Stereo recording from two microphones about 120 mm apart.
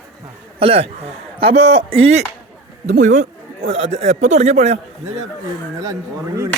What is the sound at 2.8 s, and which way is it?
Speech, 85° right.